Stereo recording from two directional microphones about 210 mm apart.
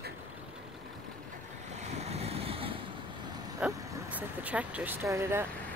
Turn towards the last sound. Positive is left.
turn(degrees=-10)  # may be behind; listen again after turning